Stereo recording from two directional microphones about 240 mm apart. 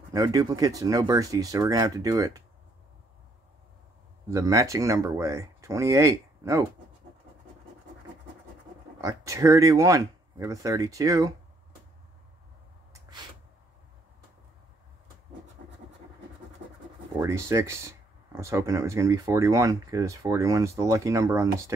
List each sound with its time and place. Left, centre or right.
0.1 s speech: centre
4.3 s speech: centre
9.0 s speech: centre
17.2 s speech: centre